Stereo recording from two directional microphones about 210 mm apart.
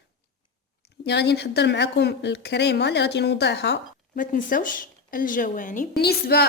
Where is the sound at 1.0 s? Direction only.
55° left (ahead or behind); by 5.9 s 35° left (ahead or behind).